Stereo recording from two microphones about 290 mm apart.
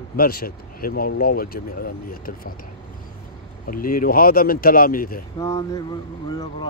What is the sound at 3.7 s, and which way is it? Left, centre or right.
Speech, left.